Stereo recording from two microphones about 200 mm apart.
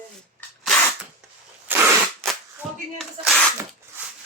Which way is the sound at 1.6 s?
10° right (ahead or behind).